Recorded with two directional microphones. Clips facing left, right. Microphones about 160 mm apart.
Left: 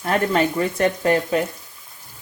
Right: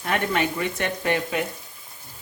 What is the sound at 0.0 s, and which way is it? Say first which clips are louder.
Speech: left 5 dB; 40° left (ahead or behind).